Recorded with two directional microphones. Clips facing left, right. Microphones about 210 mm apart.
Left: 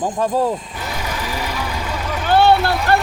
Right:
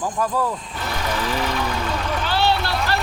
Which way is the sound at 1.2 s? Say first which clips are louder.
Right 3 dB; 10° left (ahead or behind).